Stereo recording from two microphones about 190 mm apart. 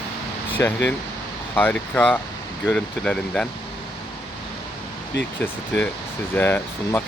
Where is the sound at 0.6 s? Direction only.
10° left (ahead or behind).